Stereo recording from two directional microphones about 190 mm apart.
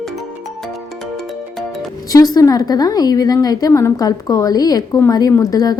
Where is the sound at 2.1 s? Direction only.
20° left (ahead or behind).